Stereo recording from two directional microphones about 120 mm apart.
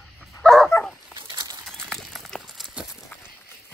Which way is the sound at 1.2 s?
40° right (ahead or behind).